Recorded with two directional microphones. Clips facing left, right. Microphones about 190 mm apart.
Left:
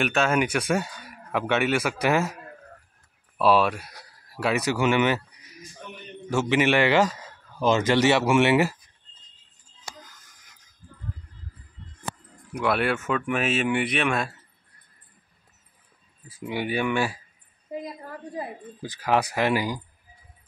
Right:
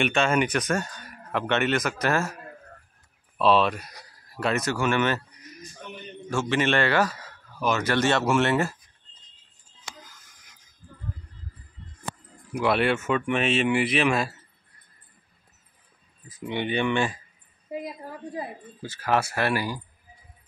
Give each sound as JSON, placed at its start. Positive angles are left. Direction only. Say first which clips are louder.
{"t": 0.0, "sound": "speech", "louder": "even", "side_deg": 5}
{"t": 3.3, "sound": "speech", "louder": "even", "side_deg": 5}
{"t": 6.5, "sound": "speech", "louder": "left 3 dB", "side_deg": 15}
{"t": 12.5, "sound": "speech", "louder": "right 1 dB", "side_deg": 0}
{"t": 16.3, "sound": "speech", "louder": "even", "side_deg": 10}
{"t": 18.8, "sound": "speech", "louder": "left 1 dB", "side_deg": 15}